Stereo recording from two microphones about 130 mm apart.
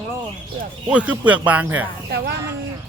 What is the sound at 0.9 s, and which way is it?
Speech, 10° right (ahead or behind).